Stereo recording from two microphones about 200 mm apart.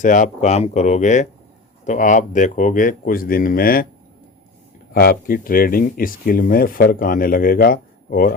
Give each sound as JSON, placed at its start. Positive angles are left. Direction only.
{"t": 0.0, "sound": "speech", "side_deg": 40}
{"t": 4.9, "sound": "speech", "side_deg": 45}